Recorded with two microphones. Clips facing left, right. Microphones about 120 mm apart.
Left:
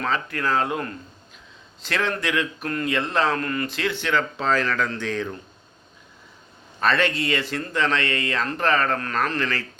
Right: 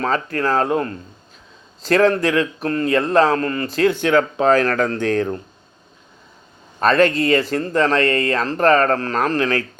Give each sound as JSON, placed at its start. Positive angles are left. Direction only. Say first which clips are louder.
{"t": 0.0, "sound": "a man's voice", "louder": "right 5 dB", "side_deg": -40}
{"t": 6.7, "sound": "a man's voice", "louder": "right 7 dB", "side_deg": -40}